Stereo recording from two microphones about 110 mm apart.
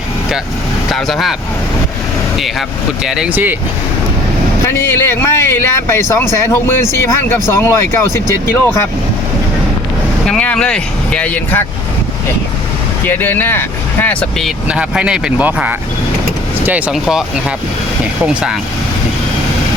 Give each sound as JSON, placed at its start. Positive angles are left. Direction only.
{"t": 0.9, "sound": "speech", "side_deg": 0}
{"t": 2.4, "sound": "speech", "side_deg": -5}
{"t": 4.7, "sound": "speech", "side_deg": 20}
{"t": 10.2, "sound": "speech", "side_deg": 10}
{"t": 13.1, "sound": "speech", "side_deg": 15}
{"t": 14.7, "sound": "speech", "side_deg": -10}